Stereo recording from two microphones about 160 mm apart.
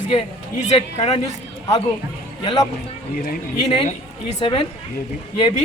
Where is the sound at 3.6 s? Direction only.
35° left (ahead or behind).